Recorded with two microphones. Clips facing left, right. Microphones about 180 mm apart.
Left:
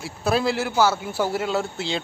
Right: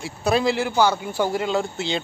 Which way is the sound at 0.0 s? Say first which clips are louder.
Right 2 dB; centre (ahead or behind).